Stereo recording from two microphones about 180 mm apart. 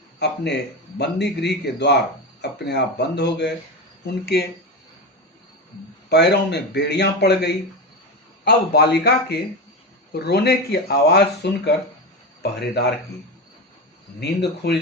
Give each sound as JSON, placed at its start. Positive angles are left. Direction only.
{"t": 0.2, "sound": "a man's voice", "side_deg": 70}
{"t": 6.1, "sound": "a man's voice", "side_deg": 65}
{"t": 14.2, "sound": "a man's voice", "side_deg": 65}